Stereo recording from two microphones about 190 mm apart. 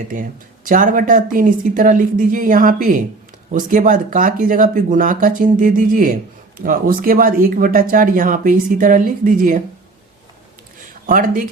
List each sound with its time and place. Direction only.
0.1 s speech: 45° right (ahead or behind)
11.0 s speech: 45° right (ahead or behind)